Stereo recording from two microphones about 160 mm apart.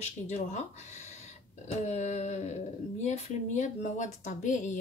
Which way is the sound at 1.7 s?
45° left (ahead or behind).